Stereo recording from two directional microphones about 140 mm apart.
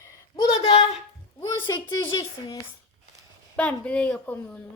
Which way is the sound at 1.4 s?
25° left (ahead or behind).